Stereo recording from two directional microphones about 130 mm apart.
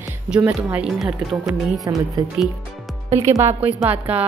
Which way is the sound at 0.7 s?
5° right (ahead or behind).